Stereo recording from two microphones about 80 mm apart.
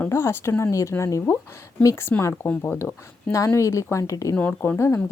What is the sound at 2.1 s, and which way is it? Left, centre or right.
Speech, left.